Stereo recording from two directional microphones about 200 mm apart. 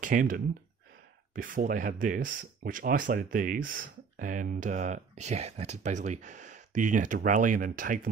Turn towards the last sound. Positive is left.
turn(degrees=-45)  # may be behind; listen again after turning